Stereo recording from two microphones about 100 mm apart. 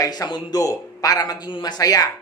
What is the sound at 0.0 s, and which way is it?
A man's voice, 40° left (ahead or behind).